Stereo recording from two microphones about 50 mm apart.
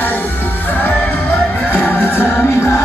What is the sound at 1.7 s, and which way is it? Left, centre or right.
Music, left.